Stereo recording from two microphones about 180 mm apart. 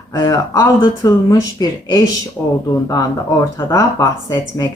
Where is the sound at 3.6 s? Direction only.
15° left (ahead or behind).